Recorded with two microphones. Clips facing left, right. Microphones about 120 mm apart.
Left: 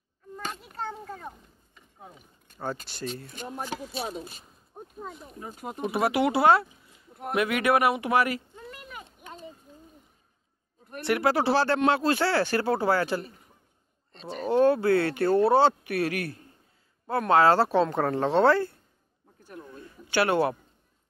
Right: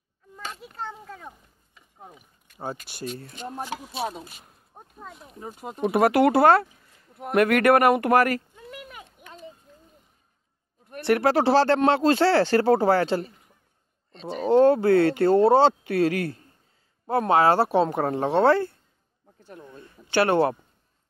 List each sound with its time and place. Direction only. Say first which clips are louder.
1.0 s a sound: left 2 dB; 5° left (ahead or behind)
2.5 s speech: even; 10° right (ahead or behind)
5.9 s speech: right 6 dB; 50° right (ahead or behind)
11.1 s speech: right 4 dB; 35° right (ahead or behind)
14.5 s speech: right 4 dB; 30° right (ahead or behind)
19.4 s a sound: even; 30° right (ahead or behind)